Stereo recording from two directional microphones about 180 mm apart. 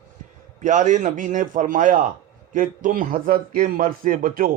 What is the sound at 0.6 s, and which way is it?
Speech, 45° right (ahead or behind).